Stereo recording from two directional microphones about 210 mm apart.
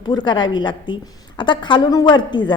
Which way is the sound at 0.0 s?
20° left (ahead or behind).